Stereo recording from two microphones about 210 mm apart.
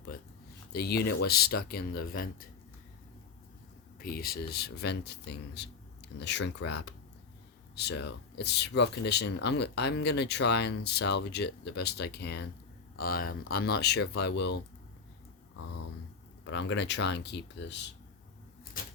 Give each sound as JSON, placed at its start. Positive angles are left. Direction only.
{"t": 0.7, "sound": "speech", "side_deg": 50}
{"t": 4.0, "sound": "speech", "side_deg": 45}
{"t": 16.5, "sound": "speech", "side_deg": 60}
{"t": 18.8, "sound": "typewriter", "side_deg": 45}